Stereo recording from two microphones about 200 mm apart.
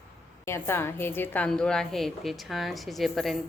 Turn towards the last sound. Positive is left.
turn(degrees=0)  # may be behind; listen again after turning